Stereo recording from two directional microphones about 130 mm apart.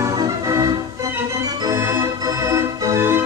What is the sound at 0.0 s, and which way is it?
Music, 25° right (ahead or behind).